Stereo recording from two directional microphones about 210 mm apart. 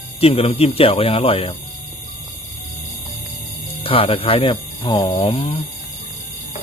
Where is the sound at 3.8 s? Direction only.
25° left (ahead or behind).